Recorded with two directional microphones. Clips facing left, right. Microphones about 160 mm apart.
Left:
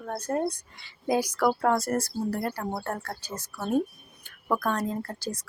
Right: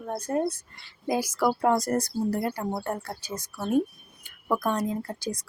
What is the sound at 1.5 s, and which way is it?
A woman's voice, 10° right (ahead or behind).